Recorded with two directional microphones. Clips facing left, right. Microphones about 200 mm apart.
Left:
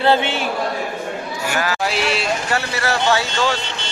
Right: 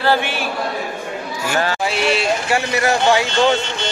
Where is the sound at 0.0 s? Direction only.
20° left (ahead or behind).